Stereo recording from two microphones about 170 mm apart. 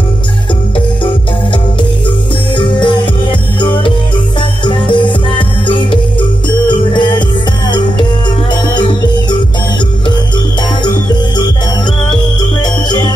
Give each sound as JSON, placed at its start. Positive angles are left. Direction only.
{"t": 2.5, "sound": "music", "side_deg": 30}
{"t": 12.1, "sound": "music", "side_deg": 25}